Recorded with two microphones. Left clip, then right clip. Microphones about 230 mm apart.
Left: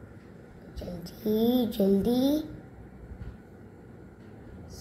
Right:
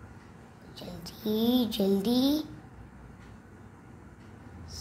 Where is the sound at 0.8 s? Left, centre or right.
Centre.